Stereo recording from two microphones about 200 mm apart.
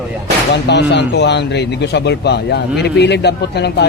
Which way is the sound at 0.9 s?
60° left (ahead or behind).